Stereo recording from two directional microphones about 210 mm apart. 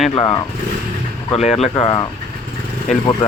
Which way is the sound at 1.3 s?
30° left (ahead or behind).